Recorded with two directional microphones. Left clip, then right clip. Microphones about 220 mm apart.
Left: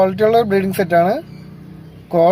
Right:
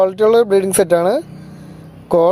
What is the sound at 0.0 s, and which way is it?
Speech, 40° right (ahead or behind).